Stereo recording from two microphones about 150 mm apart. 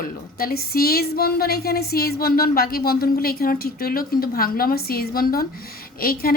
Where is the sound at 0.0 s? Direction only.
80° left.